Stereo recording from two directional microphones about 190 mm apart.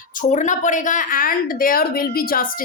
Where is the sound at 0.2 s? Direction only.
40° left (ahead or behind).